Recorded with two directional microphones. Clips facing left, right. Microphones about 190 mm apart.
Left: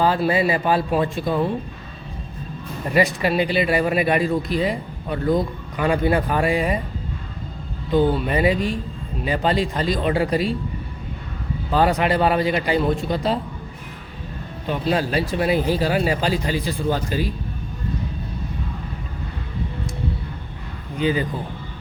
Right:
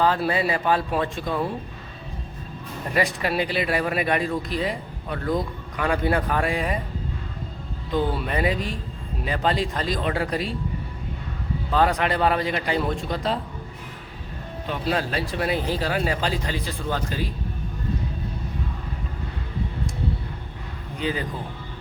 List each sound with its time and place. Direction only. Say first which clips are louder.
0.0 s speech: left 3 dB; 5° left (ahead or behind)
2.9 s speech: left 5 dB; 5° left (ahead or behind)
8.1 s speech: left 5 dB; 5° left (ahead or behind)
11.7 s speech: left 3 dB; 5° left (ahead or behind)
14.7 s speech: left 4 dB; 5° left (ahead or behind)
21.0 s speech: left 6 dB; centre (ahead or behind)